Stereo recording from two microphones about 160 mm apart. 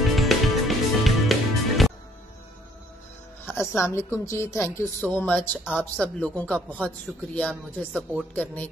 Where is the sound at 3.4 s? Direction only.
15° left (ahead or behind).